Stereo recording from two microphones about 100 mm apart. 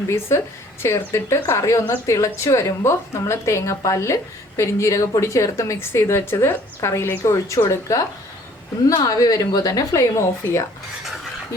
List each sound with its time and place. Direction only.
0.1 s a woman's voice: 25° left (ahead or behind)